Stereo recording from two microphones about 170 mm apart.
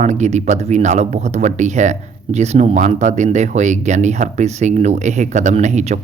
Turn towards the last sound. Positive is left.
turn(degrees=-45)  # may be behind; listen again after turning